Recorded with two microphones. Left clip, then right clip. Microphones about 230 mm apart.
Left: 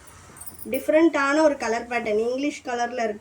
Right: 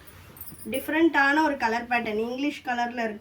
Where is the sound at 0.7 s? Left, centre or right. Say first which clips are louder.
Left 4 dB; centre.